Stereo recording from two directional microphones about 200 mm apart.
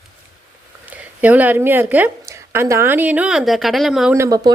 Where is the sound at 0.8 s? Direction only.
10° right (ahead or behind).